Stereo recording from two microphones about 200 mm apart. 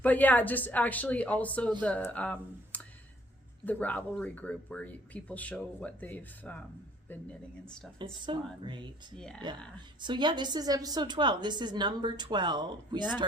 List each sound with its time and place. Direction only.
0.0 s speech: 10° left (ahead or behind)
8.3 s a woman's voice: 25° right (ahead or behind)
9.1 s speech: 5° left (ahead or behind)
10.0 s a woman's voice: 25° right (ahead or behind)